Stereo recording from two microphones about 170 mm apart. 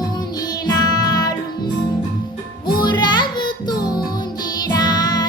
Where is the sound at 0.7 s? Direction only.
20° left (ahead or behind).